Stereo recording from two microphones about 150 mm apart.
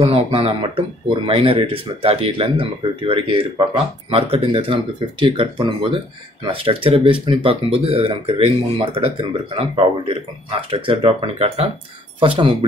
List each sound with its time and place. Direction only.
0.0 s speech: 40° right (ahead or behind)